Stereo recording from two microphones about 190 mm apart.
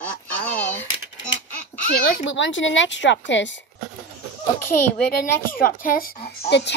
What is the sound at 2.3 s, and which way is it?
Speech, 80° left.